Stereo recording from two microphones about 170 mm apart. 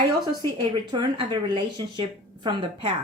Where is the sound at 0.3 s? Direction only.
25° right (ahead or behind).